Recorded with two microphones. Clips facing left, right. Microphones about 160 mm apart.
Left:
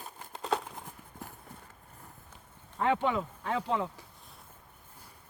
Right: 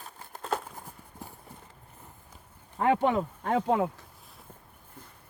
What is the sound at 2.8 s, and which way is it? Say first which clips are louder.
Speech: right 4 dB; 45° right (ahead or behind).